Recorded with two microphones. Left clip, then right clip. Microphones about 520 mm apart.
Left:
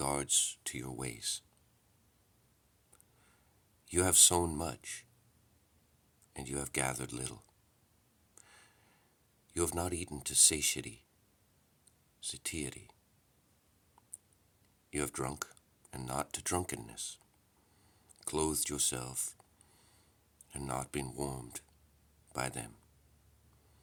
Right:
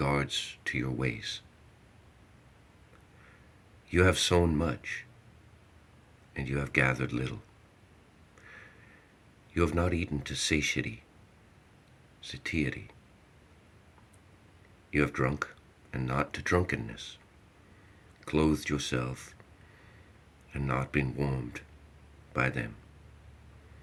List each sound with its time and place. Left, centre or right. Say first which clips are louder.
0.0 s speech: right 4 dB; left
3.8 s speech: right 4 dB; left
6.3 s speech: right 9 dB; left
9.5 s speech: right 7 dB; left
12.2 s speech: right 8 dB; left
14.8 s speech: right 9 dB; left
18.2 s speech: right 7 dB; left
20.5 s speech: right 7 dB; left